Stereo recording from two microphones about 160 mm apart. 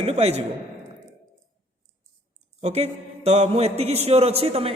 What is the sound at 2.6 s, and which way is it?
A man's voice, 40° right (ahead or behind).